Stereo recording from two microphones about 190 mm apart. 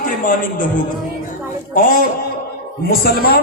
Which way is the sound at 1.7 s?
45° left (ahead or behind).